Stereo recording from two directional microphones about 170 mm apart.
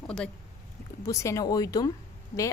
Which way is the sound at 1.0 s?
20° left (ahead or behind).